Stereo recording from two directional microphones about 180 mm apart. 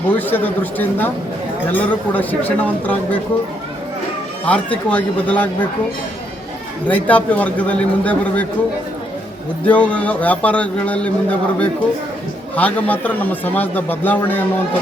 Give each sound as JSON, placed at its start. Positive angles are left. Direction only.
{"t": 0.1, "sound": "a man's voice", "side_deg": 10}
{"t": 4.4, "sound": "a man's voice", "side_deg": 5}
{"t": 6.8, "sound": "a man's voice", "side_deg": 10}
{"t": 9.6, "sound": "a man's voice", "side_deg": 5}